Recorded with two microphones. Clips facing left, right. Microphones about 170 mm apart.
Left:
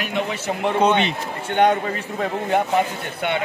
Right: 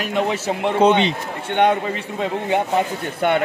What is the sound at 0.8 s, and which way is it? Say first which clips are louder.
A man's voice: right 5 dB; 25° right (ahead or behind).